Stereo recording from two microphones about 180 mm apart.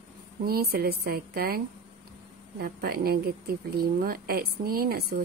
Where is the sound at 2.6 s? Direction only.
60° right (ahead or behind).